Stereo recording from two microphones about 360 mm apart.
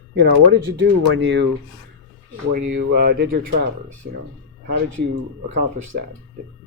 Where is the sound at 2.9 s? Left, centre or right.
Right.